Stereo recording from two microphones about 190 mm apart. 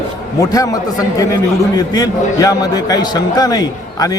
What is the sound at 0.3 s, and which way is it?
A man's voice, 20° left (ahead or behind).